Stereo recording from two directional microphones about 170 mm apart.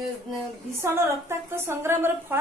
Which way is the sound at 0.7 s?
15° right (ahead or behind).